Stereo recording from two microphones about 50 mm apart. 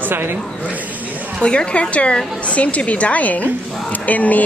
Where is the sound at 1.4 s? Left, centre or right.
Left.